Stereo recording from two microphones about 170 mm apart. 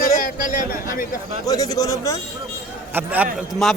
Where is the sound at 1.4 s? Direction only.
20° left (ahead or behind).